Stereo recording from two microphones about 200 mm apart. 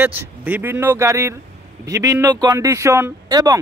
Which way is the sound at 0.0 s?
10° right (ahead or behind).